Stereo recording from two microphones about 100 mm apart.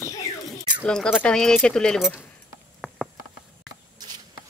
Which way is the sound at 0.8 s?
10° left (ahead or behind).